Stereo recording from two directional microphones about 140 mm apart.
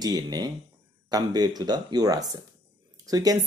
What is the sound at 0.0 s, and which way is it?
Speech, 30° right (ahead or behind).